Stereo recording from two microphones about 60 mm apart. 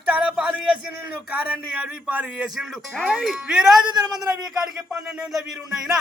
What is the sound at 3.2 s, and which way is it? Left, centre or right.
Speech, centre.